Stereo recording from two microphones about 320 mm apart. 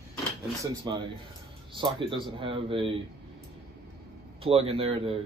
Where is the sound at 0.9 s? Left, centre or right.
Centre.